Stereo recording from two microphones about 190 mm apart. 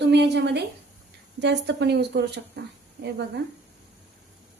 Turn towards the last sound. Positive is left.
turn(degrees=-65)  # may be behind; listen again after turning